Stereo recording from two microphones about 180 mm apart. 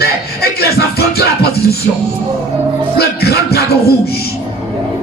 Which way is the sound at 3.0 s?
60° left (ahead or behind).